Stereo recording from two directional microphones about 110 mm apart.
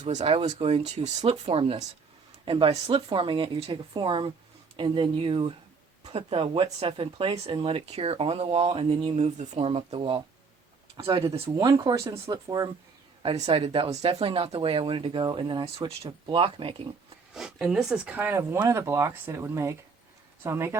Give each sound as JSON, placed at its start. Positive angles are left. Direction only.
{"t": 0.0, "sound": "speech", "side_deg": -90}
{"t": 0.4, "sound": "speech", "side_deg": -75}
{"t": 2.4, "sound": "speech", "side_deg": -50}
{"t": 6.1, "sound": "speech", "side_deg": -60}
{"t": 11.4, "sound": "speech", "side_deg": -30}
{"t": 13.5, "sound": "speech", "side_deg": -55}
{"t": 17.3, "sound": "speech", "side_deg": -5}